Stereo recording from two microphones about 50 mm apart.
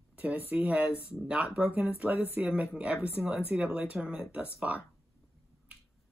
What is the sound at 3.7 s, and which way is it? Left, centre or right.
Speech, right.